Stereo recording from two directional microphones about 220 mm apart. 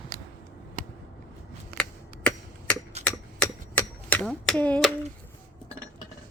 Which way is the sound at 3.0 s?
5° left (ahead or behind).